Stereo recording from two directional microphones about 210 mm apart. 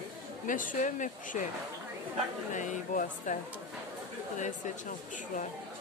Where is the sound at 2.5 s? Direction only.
35° left (ahead or behind).